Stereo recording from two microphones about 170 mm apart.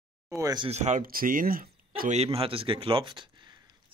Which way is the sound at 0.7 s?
40° right (ahead or behind).